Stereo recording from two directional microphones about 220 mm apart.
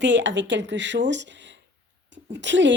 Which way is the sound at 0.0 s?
55° right (ahead or behind).